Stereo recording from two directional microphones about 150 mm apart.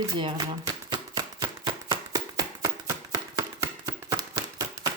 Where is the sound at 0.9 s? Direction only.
30° right (ahead or behind).